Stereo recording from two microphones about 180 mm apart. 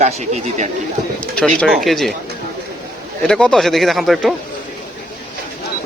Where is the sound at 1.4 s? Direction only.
5° left (ahead or behind).